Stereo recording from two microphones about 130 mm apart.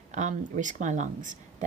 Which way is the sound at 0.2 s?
70° right (ahead or behind).